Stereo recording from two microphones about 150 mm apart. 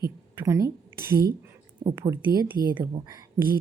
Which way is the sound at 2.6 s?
75° right (ahead or behind).